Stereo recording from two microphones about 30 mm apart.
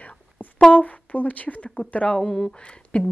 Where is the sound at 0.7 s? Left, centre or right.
Left.